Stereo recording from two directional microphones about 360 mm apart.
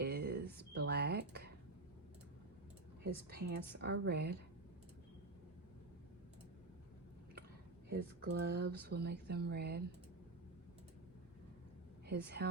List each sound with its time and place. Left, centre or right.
0.0 s a sound: right
3.0 s a woman's voice: right
7.9 s a woman's voice: right
12.0 s speech: right